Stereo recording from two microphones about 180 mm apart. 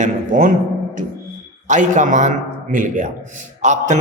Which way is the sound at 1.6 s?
45° right (ahead or behind).